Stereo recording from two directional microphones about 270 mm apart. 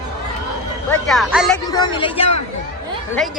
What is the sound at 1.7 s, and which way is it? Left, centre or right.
Speech, centre.